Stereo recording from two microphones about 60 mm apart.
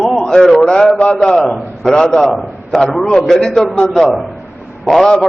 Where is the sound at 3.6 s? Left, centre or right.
Left.